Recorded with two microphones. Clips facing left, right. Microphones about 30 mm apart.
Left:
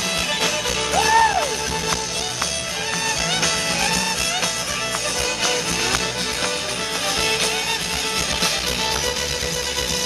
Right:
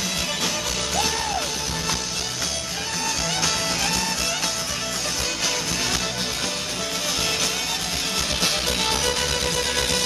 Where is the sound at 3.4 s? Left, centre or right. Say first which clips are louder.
Left 3 dB; centre.